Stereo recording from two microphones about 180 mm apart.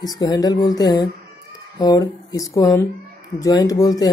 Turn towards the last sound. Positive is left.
turn(degrees=20)  # may be behind; listen again after turning